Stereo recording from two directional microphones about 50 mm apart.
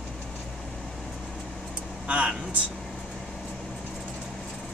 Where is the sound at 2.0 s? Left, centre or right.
Right.